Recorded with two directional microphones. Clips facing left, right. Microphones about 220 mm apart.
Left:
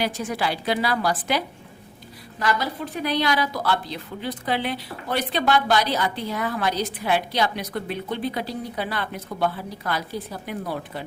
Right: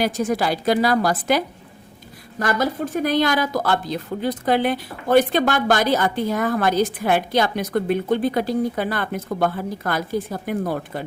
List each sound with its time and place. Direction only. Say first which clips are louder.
0.0 s speech: right 5 dB; 45° right (ahead or behind)